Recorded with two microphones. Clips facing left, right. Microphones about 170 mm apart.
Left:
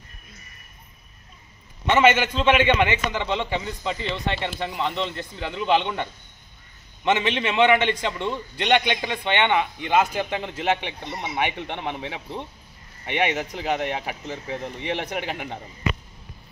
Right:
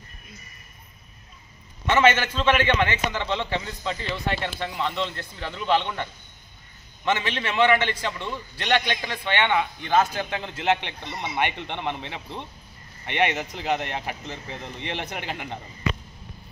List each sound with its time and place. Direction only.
1.9 s a man's voice: 15° left (ahead or behind)
7.1 s a man's voice: 20° left (ahead or behind)